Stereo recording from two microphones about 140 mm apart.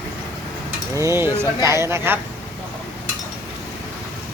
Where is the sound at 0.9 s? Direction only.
20° right (ahead or behind).